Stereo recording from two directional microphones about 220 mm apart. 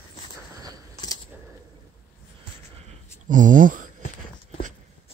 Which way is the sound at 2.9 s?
35° right (ahead or behind).